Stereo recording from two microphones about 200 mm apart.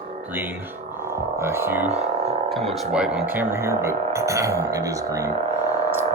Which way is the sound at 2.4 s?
Centre (ahead or behind).